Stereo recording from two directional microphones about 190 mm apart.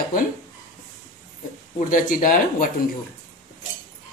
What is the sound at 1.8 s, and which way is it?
Speech, 45° left (ahead or behind).